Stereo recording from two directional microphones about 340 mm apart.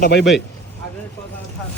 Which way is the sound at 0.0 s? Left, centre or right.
Left.